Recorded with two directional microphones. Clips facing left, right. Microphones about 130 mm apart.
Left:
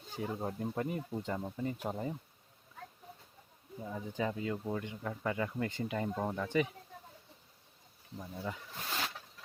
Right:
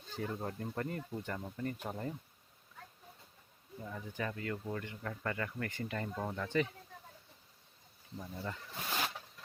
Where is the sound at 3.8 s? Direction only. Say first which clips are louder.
Left 4 dB; 15° left (ahead or behind).